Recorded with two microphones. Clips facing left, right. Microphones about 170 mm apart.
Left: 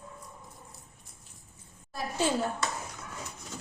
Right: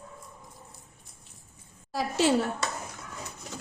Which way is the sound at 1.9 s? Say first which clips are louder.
Right 5 dB; 85° right.